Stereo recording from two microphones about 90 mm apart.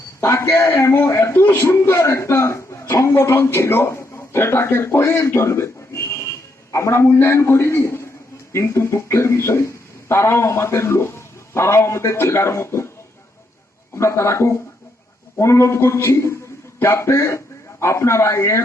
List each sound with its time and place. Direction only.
0.2 s a man's voice: 30° left (ahead or behind)
13.9 s a man's voice: 30° left (ahead or behind)